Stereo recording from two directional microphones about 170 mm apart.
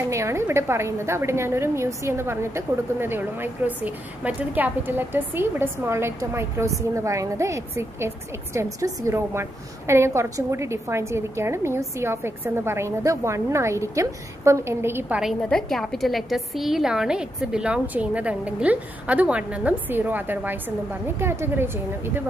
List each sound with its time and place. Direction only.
0.1 s a woman's voice: 15° right (ahead or behind)
15.4 s a woman's voice: 5° left (ahead or behind); by 22.2 s 15° right (ahead or behind)